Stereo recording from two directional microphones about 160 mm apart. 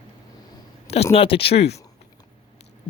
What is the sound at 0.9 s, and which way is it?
Speech, 40° left (ahead or behind).